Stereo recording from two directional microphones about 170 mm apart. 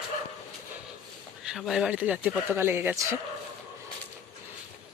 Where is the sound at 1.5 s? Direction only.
Centre (ahead or behind).